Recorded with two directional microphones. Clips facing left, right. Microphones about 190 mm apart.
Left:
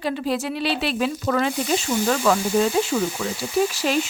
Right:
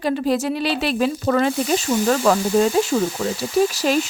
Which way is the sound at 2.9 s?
35° right (ahead or behind).